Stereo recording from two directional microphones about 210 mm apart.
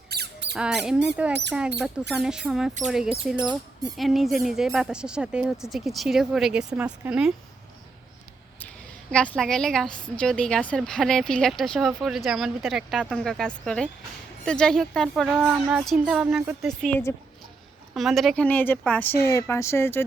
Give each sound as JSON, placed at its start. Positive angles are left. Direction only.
{"t": 0.1, "sound": "a sound", "side_deg": -50}
{"t": 0.5, "sound": "a woman's voice", "side_deg": 0}
{"t": 9.3, "sound": "a woman's voice", "side_deg": 0}